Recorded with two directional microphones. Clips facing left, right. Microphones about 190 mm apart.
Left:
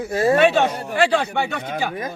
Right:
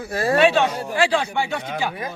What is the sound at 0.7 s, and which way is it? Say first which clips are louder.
Speech: left 1 dB; 60° left (ahead or behind).